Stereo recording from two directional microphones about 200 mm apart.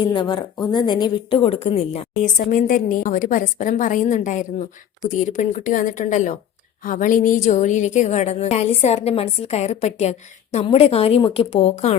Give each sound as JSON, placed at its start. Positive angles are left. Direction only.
{"t": 0.0, "sound": "a woman's voice", "side_deg": 25}